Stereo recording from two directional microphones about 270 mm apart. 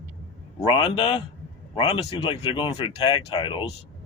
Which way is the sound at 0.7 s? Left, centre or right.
Centre.